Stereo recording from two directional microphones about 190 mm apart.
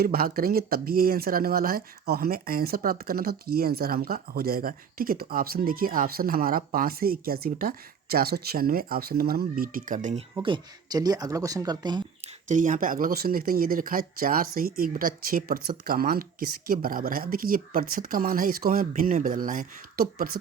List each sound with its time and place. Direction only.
0.0 s speech: 50° right (ahead or behind)
10.4 s speech: 25° right (ahead or behind)
12.5 s speech: 40° right (ahead or behind)